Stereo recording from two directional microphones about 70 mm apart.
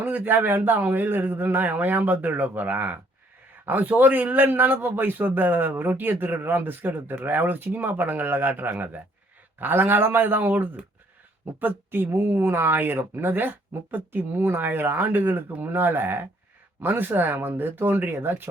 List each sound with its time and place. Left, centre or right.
0.0 s a man's voice: right